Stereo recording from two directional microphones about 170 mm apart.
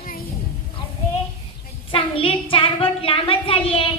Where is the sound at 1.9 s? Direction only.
30° left (ahead or behind).